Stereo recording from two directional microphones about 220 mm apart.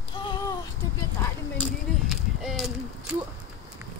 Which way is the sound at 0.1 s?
20° left (ahead or behind).